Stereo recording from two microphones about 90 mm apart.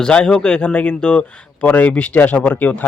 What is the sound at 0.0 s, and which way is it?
A man's voice, 10° left (ahead or behind).